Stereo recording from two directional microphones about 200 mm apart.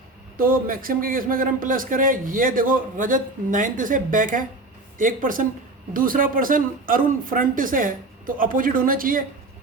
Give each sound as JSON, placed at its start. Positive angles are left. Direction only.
{"t": 0.3, "sound": "a man's voice", "side_deg": -45}